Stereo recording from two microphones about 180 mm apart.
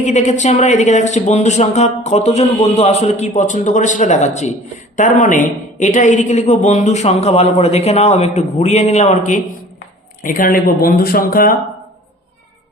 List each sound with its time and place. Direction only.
0.0 s speech: 40° left (ahead or behind)
10.2 s speech: 50° left (ahead or behind)